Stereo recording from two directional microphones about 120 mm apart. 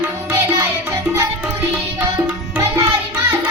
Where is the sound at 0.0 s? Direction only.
20° right (ahead or behind).